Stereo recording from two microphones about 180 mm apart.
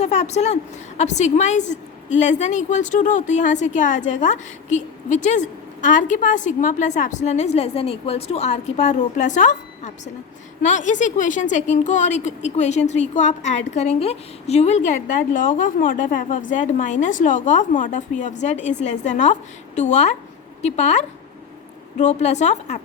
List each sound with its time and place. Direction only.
0.0 s a woman's voice: 40° left (ahead or behind)